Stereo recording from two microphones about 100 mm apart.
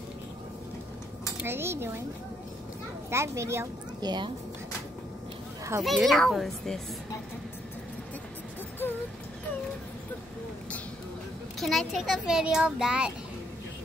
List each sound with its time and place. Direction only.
1.4 s a child's voice: 25° right (ahead or behind)
3.1 s a child's voice: 25° right (ahead or behind)
4.0 s speech: 45° right (ahead or behind)
5.8 s a child's voice: centre (ahead or behind)
11.6 s a child's voice: centre (ahead or behind)